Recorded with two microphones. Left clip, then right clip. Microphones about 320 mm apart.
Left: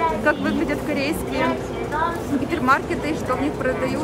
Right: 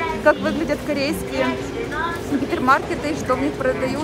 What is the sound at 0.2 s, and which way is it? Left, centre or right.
A woman's voice, centre.